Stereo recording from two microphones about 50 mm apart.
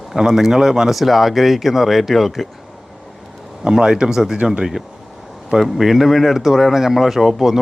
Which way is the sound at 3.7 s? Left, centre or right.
Centre.